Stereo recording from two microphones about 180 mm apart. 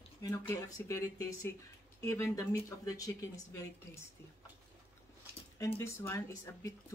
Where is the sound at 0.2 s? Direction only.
20° left (ahead or behind).